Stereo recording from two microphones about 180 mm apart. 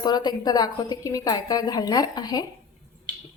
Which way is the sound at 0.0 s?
25° left (ahead or behind).